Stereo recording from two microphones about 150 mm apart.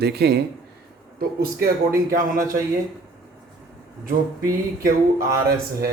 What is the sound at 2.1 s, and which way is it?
Speech, 70° right (ahead or behind).